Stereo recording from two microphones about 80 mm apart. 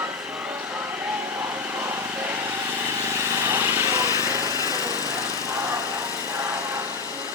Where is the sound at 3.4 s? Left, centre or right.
Right.